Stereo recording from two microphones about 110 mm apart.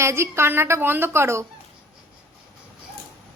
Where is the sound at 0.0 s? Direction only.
25° right (ahead or behind).